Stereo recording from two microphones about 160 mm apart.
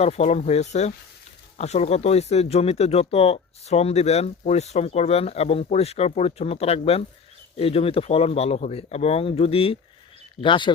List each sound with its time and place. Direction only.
0.0 s speech: 45° left (ahead or behind)